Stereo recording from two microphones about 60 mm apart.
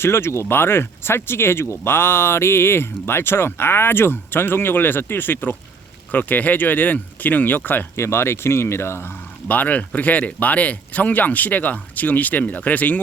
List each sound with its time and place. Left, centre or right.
0.0 s speech: left
7.9 s speech: left